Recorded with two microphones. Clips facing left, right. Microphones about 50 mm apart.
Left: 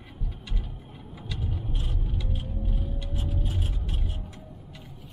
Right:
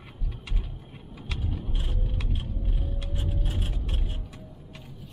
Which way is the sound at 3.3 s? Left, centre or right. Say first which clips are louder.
Left 1 dB; right.